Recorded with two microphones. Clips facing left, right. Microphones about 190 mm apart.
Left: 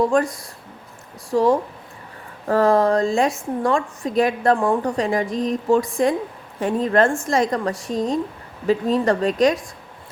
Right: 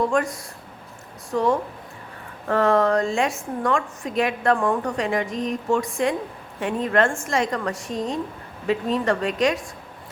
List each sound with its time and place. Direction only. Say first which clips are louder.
0.1 s a woman's voice: left 3 dB; 35° left (ahead or behind)